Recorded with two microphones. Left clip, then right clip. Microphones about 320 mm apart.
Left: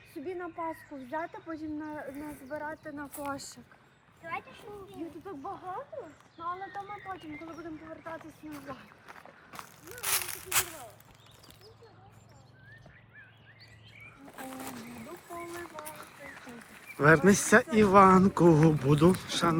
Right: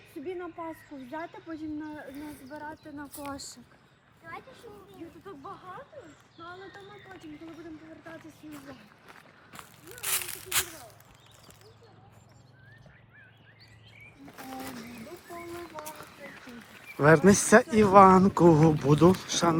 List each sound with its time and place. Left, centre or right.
0.3 s speech: centre; by 3.6 s left
4.9 s speech: left
8.0 s speech: centre
9.0 s a sound: centre
14.6 s speech: centre